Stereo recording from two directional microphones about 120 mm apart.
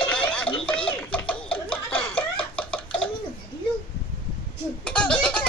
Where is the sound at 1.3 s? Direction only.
10° left (ahead or behind).